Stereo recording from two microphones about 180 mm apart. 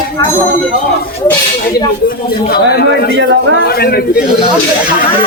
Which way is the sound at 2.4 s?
60° left (ahead or behind).